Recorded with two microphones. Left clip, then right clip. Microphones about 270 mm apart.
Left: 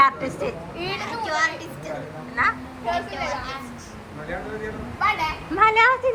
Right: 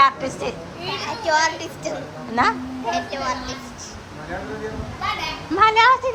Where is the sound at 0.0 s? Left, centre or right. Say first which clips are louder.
Right 2 dB; centre.